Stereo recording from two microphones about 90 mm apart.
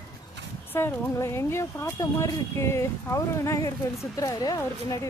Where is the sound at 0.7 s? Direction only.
25° left (ahead or behind).